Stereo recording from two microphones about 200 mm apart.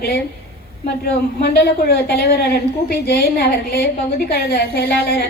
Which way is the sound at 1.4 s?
55° left (ahead or behind).